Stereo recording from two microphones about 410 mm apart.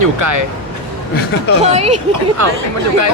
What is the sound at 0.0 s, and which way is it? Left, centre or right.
Speech, right.